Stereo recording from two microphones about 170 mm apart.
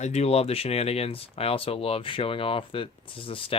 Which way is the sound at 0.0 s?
40° left (ahead or behind).